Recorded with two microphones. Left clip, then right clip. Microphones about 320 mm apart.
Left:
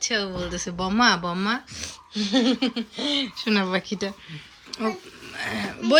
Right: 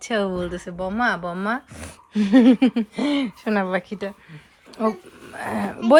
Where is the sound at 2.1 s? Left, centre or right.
Right.